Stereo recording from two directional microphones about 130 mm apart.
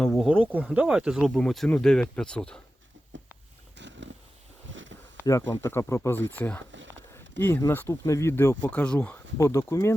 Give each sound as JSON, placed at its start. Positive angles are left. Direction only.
{"t": 0.0, "sound": "speech", "side_deg": 0}
{"t": 5.2, "sound": "speech", "side_deg": 20}